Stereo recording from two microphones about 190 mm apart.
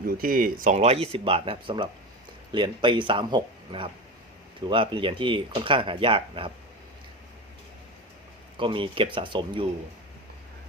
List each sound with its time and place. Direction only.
0.2 s speech: 50° right (ahead or behind); by 6.5 s 25° right (ahead or behind)
8.5 s speech: 25° right (ahead or behind)